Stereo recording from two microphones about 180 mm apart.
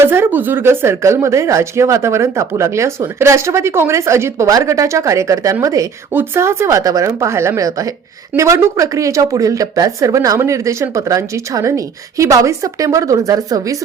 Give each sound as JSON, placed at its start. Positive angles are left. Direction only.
{"t": 0.0, "sound": "a woman's voice", "side_deg": -10}